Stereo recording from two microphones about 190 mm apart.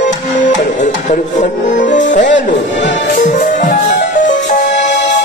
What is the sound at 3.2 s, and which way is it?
Music, 40° left (ahead or behind).